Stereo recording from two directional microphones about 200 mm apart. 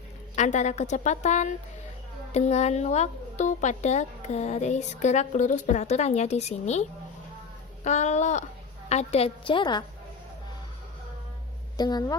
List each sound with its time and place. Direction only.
0.3 s speech: 35° left (ahead or behind)
7.9 s a woman's voice: 35° left (ahead or behind)
11.8 s a woman's voice: 20° left (ahead or behind)